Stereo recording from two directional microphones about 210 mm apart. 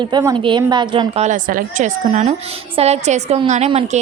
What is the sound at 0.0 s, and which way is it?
A woman's voice, 20° right (ahead or behind).